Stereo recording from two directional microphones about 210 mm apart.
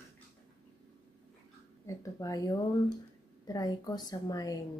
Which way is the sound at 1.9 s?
15° left (ahead or behind).